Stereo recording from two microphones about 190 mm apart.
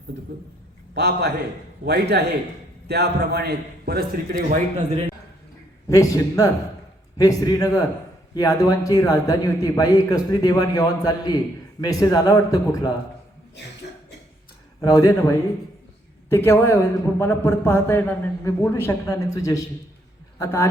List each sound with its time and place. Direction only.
0.9 s a man's voice: 60° right (ahead or behind)
5.9 s a man's voice: 15° left (ahead or behind)
14.8 s a man's voice: 20° left (ahead or behind)